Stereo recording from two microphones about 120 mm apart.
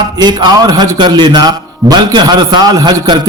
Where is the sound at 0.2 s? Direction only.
35° right (ahead or behind).